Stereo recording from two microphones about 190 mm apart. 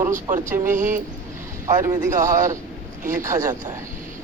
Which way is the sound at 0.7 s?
45° right (ahead or behind).